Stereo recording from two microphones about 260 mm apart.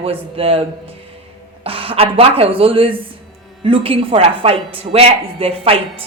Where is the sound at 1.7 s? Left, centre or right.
Right.